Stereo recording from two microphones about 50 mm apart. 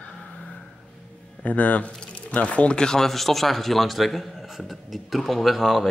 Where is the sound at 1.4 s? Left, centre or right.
Left.